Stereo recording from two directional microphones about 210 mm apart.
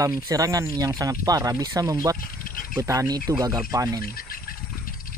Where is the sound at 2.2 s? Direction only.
40° left (ahead or behind).